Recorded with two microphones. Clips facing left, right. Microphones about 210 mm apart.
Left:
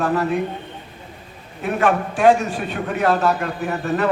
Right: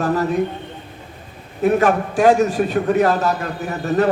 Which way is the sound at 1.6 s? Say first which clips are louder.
Right 4 dB; 40° right (ahead or behind).